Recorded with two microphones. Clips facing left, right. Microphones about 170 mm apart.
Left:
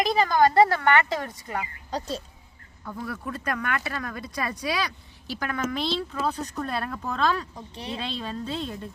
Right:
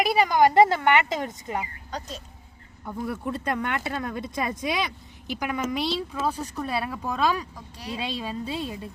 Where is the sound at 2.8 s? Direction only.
20° right (ahead or behind).